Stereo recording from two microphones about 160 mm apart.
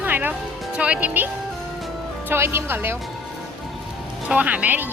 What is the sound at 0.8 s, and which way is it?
Speech, 10° right (ahead or behind).